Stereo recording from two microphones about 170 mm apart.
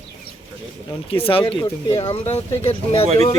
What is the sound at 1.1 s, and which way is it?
A man's voice, 30° left (ahead or behind).